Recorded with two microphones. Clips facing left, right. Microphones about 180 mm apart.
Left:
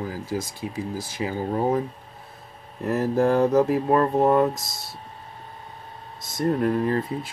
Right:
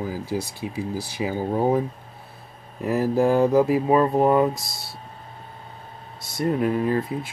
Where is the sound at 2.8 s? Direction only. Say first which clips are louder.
Right 1 dB; 15° right (ahead or behind).